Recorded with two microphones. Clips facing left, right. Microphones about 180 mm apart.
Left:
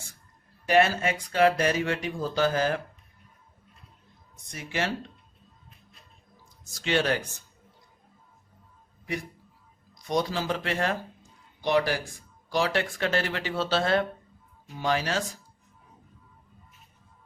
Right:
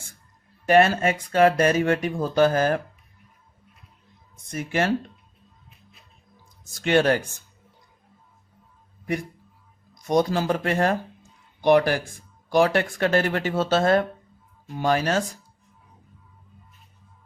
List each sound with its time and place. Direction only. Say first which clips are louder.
0.7 s speech: right 4 dB; 50° right (ahead or behind)
4.5 s speech: right 6 dB; 50° right (ahead or behind)
6.7 s speech: right 6 dB; 55° right (ahead or behind)
9.9 s speech: right 6 dB; 45° right (ahead or behind)